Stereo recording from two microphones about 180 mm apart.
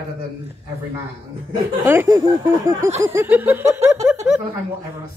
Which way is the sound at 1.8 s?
20° right (ahead or behind).